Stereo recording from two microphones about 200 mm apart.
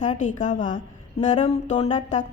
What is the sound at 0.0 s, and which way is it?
A woman's voice, 40° left (ahead or behind).